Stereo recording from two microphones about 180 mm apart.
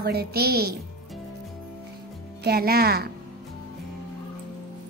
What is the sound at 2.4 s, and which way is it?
Speech, 60° right (ahead or behind).